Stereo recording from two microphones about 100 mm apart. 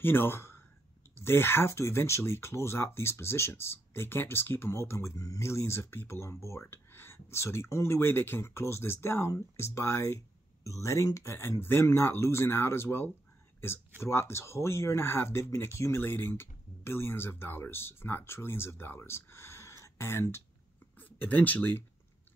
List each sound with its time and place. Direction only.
0.0 s speech: 20° left (ahead or behind)